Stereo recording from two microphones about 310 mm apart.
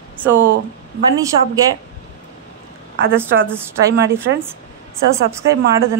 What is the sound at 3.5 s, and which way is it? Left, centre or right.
Speech, centre.